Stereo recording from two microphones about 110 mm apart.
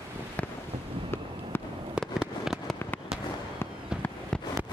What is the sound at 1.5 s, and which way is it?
Fireworks, 20° left (ahead or behind).